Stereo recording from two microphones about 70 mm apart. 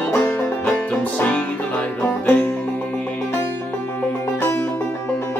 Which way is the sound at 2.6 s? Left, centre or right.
Centre.